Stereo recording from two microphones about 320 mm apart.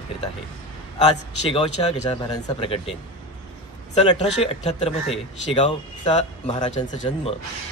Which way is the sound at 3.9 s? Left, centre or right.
Centre.